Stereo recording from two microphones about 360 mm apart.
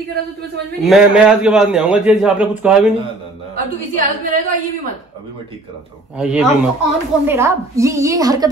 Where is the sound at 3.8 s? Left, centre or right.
Right.